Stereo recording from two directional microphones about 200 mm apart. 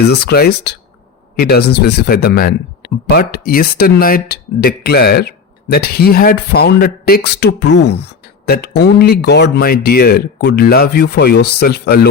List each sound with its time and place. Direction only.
0.0 s speech: 55° left (ahead or behind)